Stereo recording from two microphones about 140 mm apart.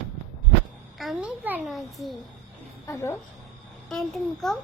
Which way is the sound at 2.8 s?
20° left (ahead or behind).